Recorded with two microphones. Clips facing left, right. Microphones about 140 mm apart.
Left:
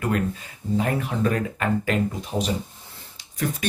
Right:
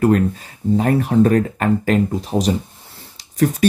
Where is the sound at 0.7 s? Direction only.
40° right (ahead or behind).